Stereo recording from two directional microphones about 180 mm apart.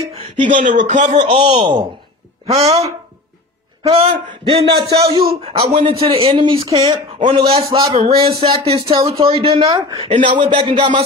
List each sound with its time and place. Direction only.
0.1 s speech: 35° right (ahead or behind)
1.4 s a man's voice: 25° right (ahead or behind)